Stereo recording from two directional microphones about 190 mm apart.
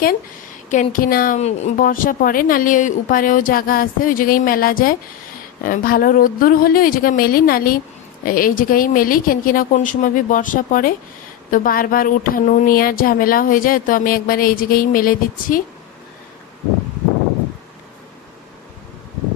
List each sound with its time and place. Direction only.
0.7 s speech: 45° left (ahead or behind)
1.4 s speech: 35° left (ahead or behind)